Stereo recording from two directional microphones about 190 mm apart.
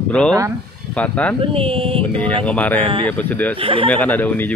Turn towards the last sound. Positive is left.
turn(degrees=10)  # may be behind; listen again after turning